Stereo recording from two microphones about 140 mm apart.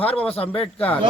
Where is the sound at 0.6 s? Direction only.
10° left (ahead or behind).